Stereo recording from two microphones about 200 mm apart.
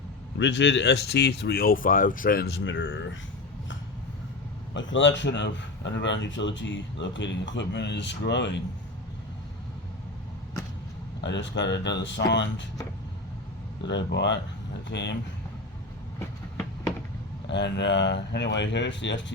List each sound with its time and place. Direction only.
0.3 s a man's voice: 65° left (ahead or behind)
4.7 s a man's voice: 70° left (ahead or behind)
11.2 s a man's voice: 65° left (ahead or behind)
13.8 s a man's voice: 60° left (ahead or behind)
17.5 s a man's voice: 60° left (ahead or behind)